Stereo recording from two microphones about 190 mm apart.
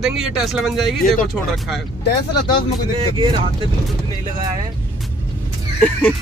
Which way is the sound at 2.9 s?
25° right (ahead or behind).